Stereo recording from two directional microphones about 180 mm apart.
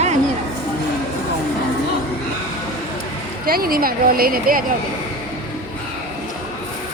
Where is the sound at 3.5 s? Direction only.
55° right (ahead or behind).